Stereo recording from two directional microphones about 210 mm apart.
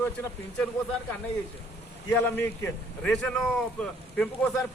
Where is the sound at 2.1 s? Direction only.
10° left (ahead or behind).